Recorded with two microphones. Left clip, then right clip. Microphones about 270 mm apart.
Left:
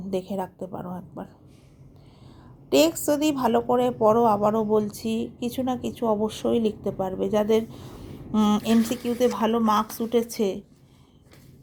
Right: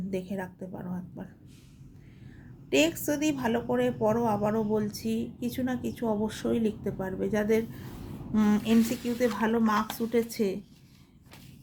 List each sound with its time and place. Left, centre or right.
0.1 s a woman's voice: left
0.9 s speech: centre
2.6 s a woman's voice: left